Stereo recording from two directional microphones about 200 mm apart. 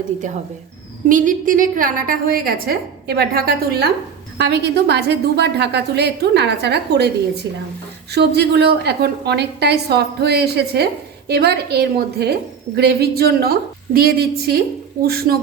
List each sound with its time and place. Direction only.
1.0 s a woman's voice: 40° right (ahead or behind)
8.1 s a woman's voice: 55° right (ahead or behind)